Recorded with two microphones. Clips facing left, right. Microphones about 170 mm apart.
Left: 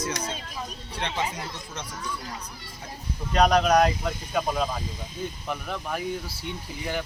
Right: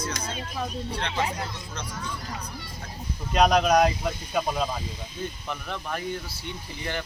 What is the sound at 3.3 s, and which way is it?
Speech, 5° right (ahead or behind).